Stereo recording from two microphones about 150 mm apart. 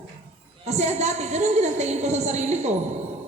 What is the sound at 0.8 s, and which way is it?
A woman's voice, 45° right (ahead or behind).